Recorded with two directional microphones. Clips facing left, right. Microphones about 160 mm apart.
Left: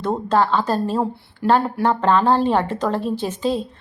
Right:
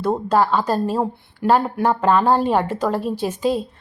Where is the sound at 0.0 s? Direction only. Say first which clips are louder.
Right 1 dB; 10° right (ahead or behind).